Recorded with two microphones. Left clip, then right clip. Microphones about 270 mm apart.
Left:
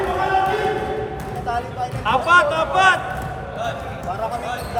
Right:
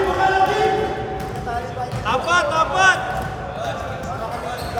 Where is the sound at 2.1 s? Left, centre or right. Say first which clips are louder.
Left 3 dB; left.